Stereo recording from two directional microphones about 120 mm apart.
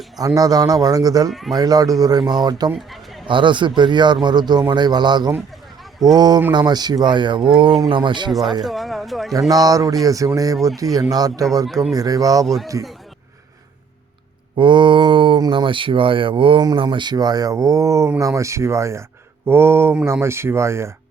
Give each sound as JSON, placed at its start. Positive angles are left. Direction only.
{"t": 0.3, "sound": "a man's voice", "side_deg": -30}
{"t": 1.3, "sound": "speech", "side_deg": 0}
{"t": 1.5, "sound": "a man's voice", "side_deg": -30}
{"t": 2.7, "sound": "a sound", "side_deg": 0}
{"t": 3.2, "sound": "a man's voice", "side_deg": -45}
{"t": 8.6, "sound": "speech", "side_deg": 0}
{"t": 9.5, "sound": "a man's voice", "side_deg": -30}
{"t": 11.6, "sound": "speech", "side_deg": 0}
{"t": 11.9, "sound": "a man's voice", "side_deg": -30}
{"t": 14.5, "sound": "a man's voice", "side_deg": -40}